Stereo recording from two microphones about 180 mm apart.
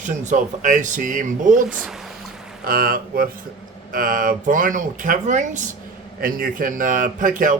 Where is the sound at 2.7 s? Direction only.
55° right (ahead or behind).